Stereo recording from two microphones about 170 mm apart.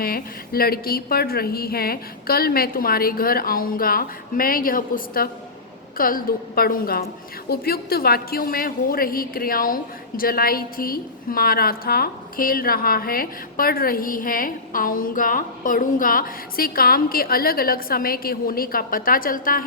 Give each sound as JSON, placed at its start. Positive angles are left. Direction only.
{"t": 0.0, "sound": "a woman's voice", "side_deg": 60}